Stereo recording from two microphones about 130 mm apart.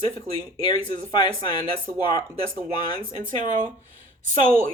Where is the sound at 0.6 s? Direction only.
35° left (ahead or behind).